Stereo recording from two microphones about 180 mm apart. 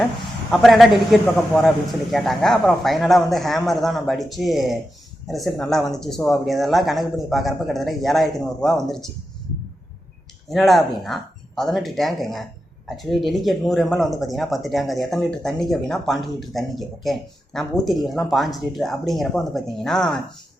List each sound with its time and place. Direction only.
0.5 s speech: centre (ahead or behind)
10.5 s speech: centre (ahead or behind)